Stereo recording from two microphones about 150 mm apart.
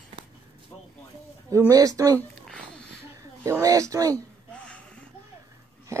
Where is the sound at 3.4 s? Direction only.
20° right (ahead or behind).